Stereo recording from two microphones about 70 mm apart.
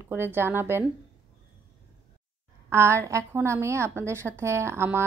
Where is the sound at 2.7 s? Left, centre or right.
Right.